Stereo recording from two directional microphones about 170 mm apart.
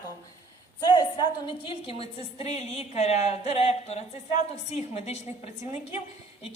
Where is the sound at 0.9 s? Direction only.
30° left (ahead or behind).